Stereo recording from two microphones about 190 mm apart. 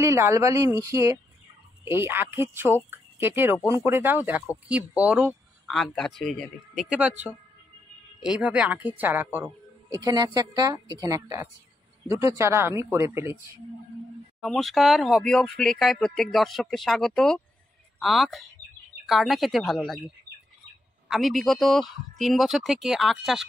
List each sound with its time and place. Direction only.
0.0 s a woman's voice: 15° right (ahead or behind)
14.4 s speech: centre (ahead or behind)
21.1 s speech: centre (ahead or behind)